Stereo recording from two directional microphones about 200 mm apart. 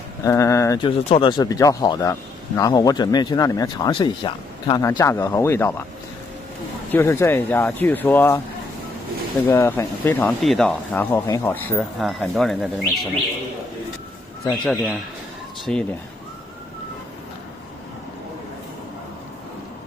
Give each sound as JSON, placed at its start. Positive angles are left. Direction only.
{"t": 0.2, "sound": "speech", "side_deg": 15}
{"t": 6.9, "sound": "speech", "side_deg": 15}
{"t": 9.5, "sound": "speech", "side_deg": 15}
{"t": 14.6, "sound": "speech", "side_deg": 0}